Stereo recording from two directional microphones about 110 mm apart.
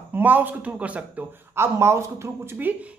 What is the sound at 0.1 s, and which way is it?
A man's voice, 15° right (ahead or behind).